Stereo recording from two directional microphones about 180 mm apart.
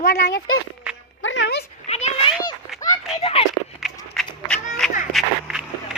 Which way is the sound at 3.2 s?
35° left (ahead or behind).